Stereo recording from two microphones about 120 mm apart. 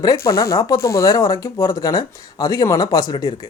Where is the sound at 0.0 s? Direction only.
30° left (ahead or behind).